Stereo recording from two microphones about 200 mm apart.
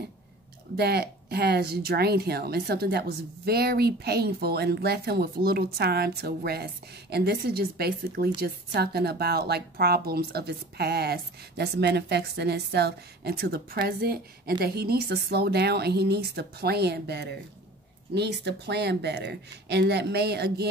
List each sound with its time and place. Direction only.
0.7 s speech: 55° right (ahead or behind)